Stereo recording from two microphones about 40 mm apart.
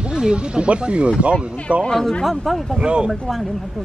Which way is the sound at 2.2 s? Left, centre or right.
Centre.